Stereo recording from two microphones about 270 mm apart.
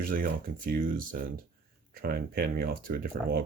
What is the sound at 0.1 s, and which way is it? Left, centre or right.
Speech, right.